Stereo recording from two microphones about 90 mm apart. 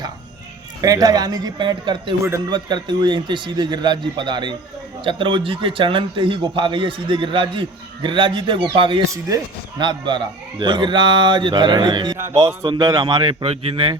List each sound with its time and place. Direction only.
0.8 s a man's voice: 45° right (ahead or behind)
5.0 s a man's voice: 70° right (ahead or behind); by 12.1 s 55° right (ahead or behind)
12.1 s music: 30° right (ahead or behind)
12.6 s speech: 55° right (ahead or behind)
13.2 s speech: 90° right